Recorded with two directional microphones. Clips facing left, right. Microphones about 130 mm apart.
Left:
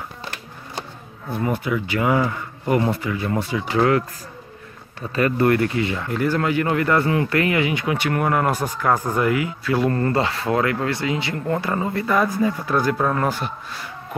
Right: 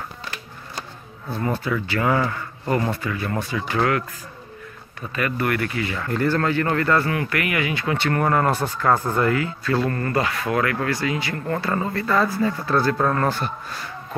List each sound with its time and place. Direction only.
1.3 s speech: 15° left (ahead or behind)
5.1 s speech: 30° left (ahead or behind)
6.0 s speech: 10° left (ahead or behind)